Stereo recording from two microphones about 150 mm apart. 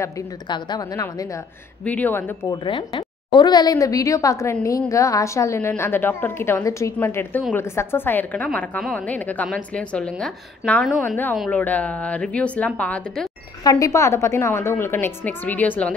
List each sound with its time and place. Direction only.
0.5 s a woman's voice: 25° left (ahead or behind)
1.9 s a woman's voice: 10° left (ahead or behind)
2.5 s a woman's voice: 30° left (ahead or behind); by 11.3 s 10° left (ahead or behind)
11.3 s a woman's voice: centre (ahead or behind)
13.7 s a woman's voice: 20° left (ahead or behind)